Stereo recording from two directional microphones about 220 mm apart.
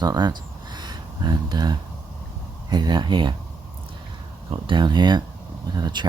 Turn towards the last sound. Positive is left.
turn(degrees=-20)  # may be behind; listen again after turning